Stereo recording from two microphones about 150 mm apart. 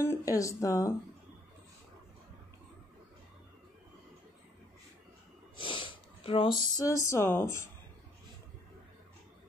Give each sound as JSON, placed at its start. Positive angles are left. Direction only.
{"t": 0.0, "sound": "a woman's voice", "side_deg": 20}
{"t": 5.6, "sound": "speech", "side_deg": 35}